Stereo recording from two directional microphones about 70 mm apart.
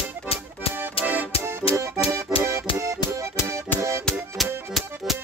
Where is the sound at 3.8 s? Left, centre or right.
Right.